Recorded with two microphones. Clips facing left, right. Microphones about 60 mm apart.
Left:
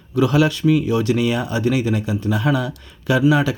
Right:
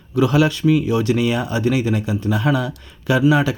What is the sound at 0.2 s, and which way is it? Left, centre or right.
Speech, right.